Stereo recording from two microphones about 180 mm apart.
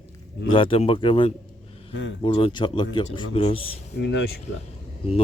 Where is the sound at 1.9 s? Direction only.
90° left.